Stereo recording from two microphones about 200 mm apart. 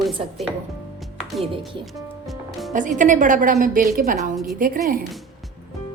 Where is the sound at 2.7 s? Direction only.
40° right (ahead or behind).